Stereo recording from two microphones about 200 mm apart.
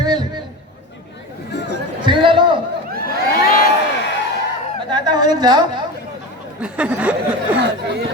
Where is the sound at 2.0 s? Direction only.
25° right (ahead or behind).